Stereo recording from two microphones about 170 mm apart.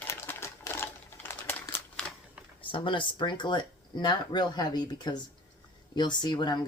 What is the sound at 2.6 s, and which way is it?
Speech, 30° left (ahead or behind).